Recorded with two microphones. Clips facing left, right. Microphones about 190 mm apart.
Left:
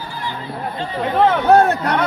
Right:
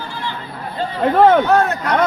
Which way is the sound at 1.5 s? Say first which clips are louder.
Left 3 dB; 35° left (ahead or behind).